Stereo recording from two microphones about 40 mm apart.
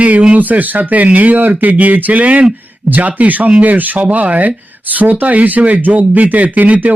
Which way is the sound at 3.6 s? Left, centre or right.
Right.